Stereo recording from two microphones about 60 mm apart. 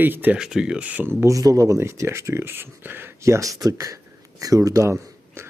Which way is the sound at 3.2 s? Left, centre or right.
Right.